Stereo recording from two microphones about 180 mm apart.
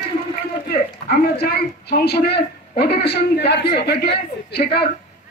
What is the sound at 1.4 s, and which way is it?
A woman's voice, 60° left (ahead or behind).